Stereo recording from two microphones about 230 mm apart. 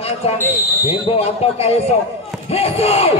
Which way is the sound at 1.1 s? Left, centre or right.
Left.